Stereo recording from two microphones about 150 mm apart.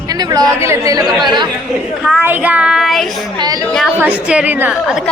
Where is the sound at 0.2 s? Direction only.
25° right (ahead or behind).